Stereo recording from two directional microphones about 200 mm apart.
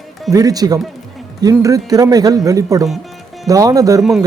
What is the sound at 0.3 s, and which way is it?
A woman's voice, 15° right (ahead or behind).